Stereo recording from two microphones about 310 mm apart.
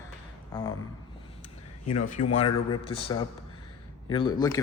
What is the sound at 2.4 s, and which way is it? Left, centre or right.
Speech, centre.